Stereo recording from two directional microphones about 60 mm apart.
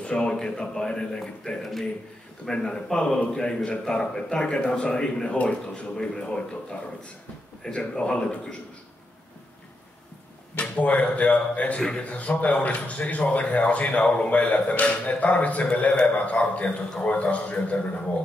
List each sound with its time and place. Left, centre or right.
0.0 s speech: centre
10.5 s speech: left